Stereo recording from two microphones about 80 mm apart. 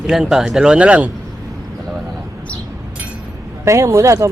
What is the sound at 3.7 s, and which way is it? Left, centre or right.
Speech, right.